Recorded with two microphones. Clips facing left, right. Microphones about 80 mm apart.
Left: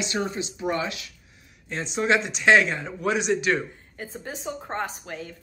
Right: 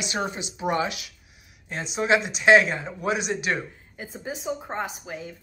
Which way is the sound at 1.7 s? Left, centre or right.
Centre.